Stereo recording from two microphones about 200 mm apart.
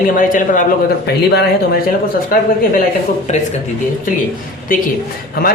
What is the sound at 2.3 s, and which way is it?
Speech, 45° left (ahead or behind).